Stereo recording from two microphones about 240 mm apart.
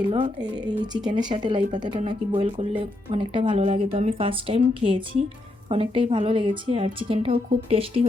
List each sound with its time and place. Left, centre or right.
0.1 s speech: right